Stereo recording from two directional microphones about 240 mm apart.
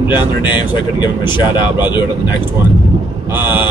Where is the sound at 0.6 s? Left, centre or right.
Centre.